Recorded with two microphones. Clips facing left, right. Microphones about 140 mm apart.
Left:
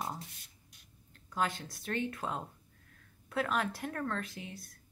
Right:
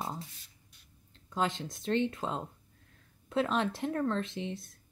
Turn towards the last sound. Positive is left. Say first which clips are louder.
# right 8 dB
turn(degrees=-25)  # may be behind; listen again after turning